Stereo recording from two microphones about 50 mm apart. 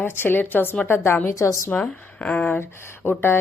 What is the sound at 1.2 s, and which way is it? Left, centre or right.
Speech, left.